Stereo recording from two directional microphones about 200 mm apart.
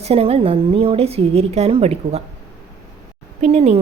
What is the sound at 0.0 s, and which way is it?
A woman's voice, 30° right (ahead or behind).